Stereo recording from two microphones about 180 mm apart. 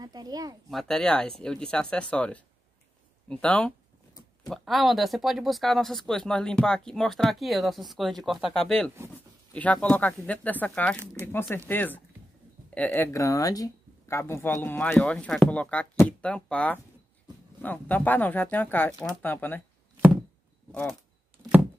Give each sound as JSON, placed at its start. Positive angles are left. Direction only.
{"t": 0.0, "sound": "a child's voice", "side_deg": -20}
{"t": 0.7, "sound": "speech", "side_deg": 0}